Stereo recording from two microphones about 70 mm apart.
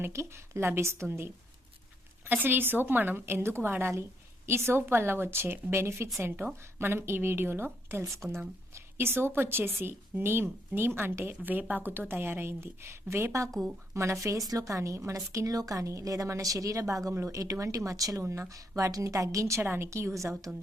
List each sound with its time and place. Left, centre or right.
0.0 s a woman's voice: right
8.0 s a woman's voice: right
8.7 s a woman's voice: right
19.6 s a woman's voice: right